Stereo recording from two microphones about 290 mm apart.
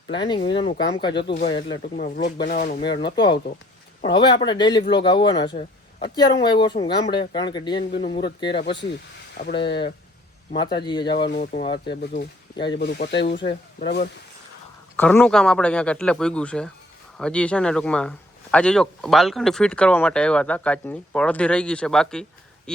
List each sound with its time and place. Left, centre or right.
0.1 s speech: centre
2.0 s speech: left
2.9 s speech: centre
7.8 s speech: left
8.1 s speech: centre
8.6 s speech: left
10.6 s speech: centre
12.8 s speech: left
14.9 s speech: centre